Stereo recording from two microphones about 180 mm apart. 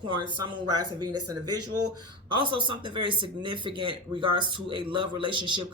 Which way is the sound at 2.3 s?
25° right (ahead or behind).